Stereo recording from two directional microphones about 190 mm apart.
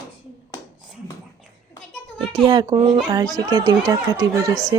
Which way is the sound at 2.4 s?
25° right (ahead or behind).